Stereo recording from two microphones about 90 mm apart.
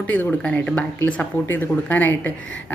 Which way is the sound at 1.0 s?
25° left (ahead or behind).